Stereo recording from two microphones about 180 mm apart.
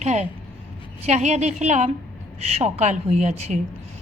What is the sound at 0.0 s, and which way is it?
A woman's voice, 40° right (ahead or behind).